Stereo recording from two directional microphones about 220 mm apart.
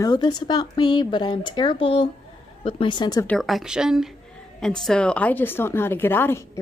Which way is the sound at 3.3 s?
Centre (ahead or behind).